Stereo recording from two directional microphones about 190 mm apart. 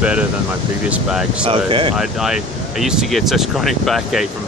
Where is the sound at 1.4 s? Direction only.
25° right (ahead or behind).